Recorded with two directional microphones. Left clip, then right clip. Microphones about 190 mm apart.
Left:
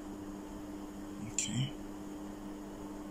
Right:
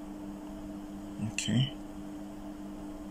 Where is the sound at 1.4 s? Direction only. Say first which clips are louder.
Right 4 dB; 45° right (ahead or behind).